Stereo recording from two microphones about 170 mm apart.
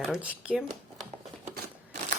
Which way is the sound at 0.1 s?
5° right (ahead or behind).